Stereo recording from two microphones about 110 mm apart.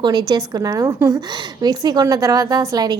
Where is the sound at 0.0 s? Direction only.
35° right (ahead or behind).